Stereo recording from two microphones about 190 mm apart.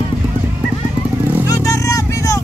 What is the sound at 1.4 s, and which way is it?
Vehicle, 15° left (ahead or behind).